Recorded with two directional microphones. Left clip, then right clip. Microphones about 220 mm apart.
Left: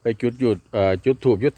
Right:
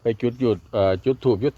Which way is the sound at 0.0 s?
10° left (ahead or behind).